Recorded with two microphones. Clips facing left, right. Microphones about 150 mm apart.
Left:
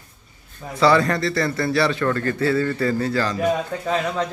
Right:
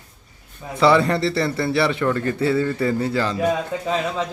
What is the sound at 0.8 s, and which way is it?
A man's voice, 25° right (ahead or behind).